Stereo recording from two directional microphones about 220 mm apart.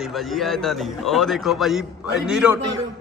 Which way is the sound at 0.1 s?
Centre (ahead or behind).